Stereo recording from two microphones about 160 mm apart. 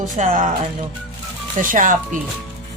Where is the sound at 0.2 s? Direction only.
55° right (ahead or behind).